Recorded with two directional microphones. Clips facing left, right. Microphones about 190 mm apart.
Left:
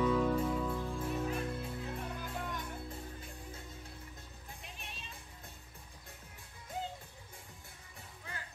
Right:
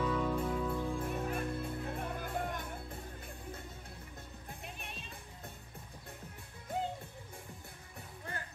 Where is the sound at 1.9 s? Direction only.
50° right (ahead or behind).